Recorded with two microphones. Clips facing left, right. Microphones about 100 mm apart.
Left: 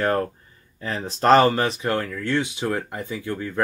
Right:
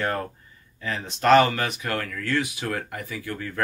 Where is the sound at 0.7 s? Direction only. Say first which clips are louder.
Left 3 dB; 35° left (ahead or behind).